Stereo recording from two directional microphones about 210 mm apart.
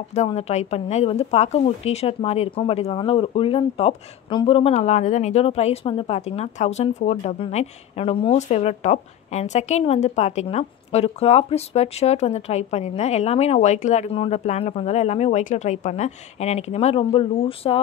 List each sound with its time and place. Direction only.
0.1 s a woman's voice: 30° left (ahead or behind)